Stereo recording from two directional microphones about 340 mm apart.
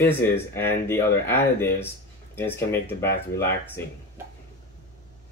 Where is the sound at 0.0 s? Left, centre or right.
Centre.